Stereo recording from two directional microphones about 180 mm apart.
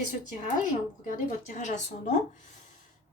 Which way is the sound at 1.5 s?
40° left (ahead or behind).